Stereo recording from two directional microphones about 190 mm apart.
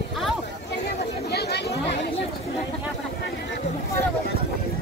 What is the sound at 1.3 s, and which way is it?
Chatter, 60° left (ahead or behind).